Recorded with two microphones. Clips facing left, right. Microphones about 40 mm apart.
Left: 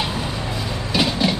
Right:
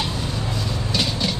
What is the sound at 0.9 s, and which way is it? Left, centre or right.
Vehicle, centre.